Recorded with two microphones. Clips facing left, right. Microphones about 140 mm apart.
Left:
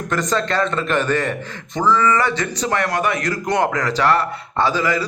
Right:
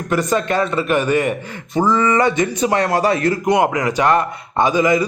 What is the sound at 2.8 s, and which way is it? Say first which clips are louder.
Speech: right 4 dB; 30° right (ahead or behind).